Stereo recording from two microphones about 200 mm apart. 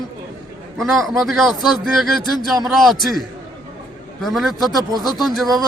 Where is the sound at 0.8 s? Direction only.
Centre (ahead or behind).